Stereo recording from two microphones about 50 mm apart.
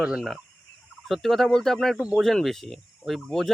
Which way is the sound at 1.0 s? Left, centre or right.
Centre.